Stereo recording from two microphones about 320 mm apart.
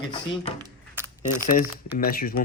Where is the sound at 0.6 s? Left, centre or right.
Centre.